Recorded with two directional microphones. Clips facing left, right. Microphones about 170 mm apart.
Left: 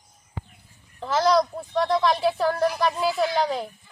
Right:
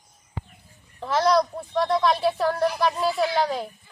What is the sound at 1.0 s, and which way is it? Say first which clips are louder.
A woman's voice: even; centre (ahead or behind).